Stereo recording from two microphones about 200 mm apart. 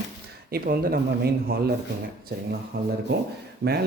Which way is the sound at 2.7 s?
50° right (ahead or behind).